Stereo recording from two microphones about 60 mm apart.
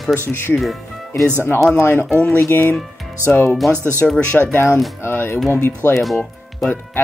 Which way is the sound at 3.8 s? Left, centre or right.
Right.